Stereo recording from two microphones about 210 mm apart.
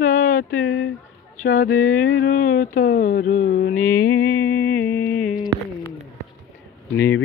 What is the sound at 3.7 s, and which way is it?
Mantra, 10° left (ahead or behind).